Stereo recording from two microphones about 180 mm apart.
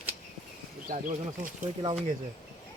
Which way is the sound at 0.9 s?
45° right (ahead or behind).